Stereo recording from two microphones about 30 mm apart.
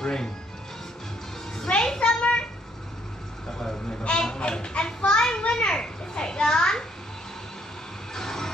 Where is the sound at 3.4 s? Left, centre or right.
Centre.